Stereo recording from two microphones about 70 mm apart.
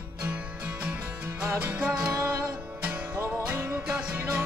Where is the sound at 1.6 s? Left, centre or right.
Right.